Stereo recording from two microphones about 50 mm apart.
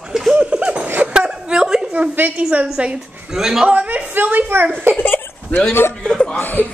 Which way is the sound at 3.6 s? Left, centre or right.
Right.